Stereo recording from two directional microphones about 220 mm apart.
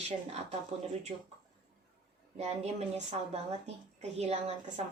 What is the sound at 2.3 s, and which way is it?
A woman's voice, 30° right (ahead or behind).